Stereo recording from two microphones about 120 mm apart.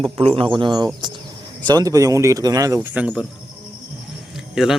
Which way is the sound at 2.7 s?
10° right (ahead or behind).